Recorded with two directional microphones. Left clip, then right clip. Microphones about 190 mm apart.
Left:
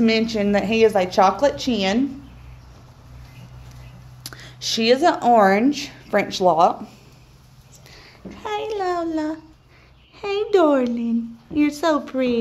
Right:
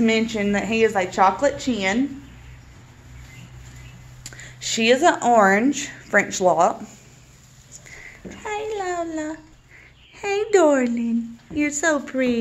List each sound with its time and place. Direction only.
0.0 s a woman's voice: 20° left (ahead or behind)
4.2 s a sound: 30° left (ahead or behind)
4.6 s a woman's voice: 15° left (ahead or behind)
4.8 s a woman's voice: centre (ahead or behind)
8.4 s a sound: 30° left (ahead or behind)
10.1 s a woman's voice: 5° left (ahead or behind)